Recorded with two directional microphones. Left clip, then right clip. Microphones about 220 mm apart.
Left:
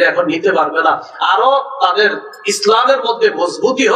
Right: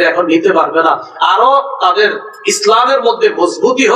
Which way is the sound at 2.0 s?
50° left (ahead or behind).